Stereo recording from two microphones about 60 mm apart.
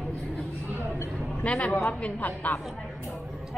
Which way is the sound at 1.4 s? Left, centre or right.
Left.